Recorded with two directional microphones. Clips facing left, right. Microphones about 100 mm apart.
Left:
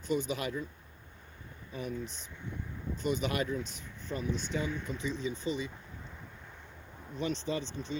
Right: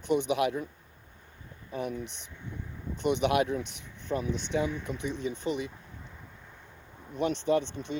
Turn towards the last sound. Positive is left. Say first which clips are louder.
# right 8 dB
turn(degrees=-60)  # may be behind; listen again after turning